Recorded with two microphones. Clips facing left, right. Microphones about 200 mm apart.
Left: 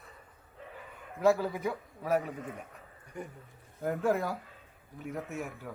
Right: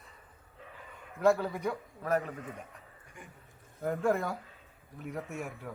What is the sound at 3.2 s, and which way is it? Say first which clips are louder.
Speech: left 11 dB; 40° left (ahead or behind).